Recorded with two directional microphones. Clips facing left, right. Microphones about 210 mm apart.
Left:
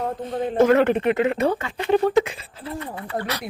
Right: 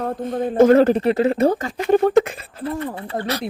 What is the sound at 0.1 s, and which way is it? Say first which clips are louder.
Speech: right 3 dB; 45° right (ahead or behind).